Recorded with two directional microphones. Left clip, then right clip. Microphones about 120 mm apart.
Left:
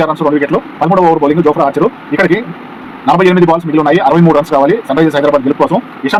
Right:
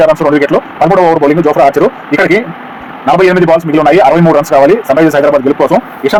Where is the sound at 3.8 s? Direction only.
45° right (ahead or behind).